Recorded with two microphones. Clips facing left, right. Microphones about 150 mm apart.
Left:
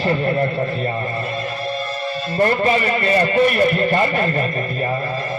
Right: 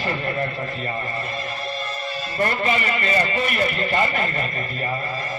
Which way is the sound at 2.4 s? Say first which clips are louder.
Left 6 dB; 40° left (ahead or behind).